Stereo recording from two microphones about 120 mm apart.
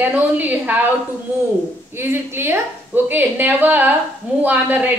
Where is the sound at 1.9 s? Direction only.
20° right (ahead or behind).